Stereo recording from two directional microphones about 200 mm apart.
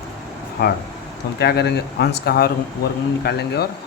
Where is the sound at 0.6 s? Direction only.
55° left (ahead or behind).